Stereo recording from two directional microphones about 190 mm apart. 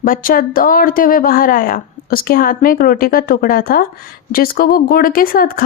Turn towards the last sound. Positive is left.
turn(degrees=50)  # may be behind; listen again after turning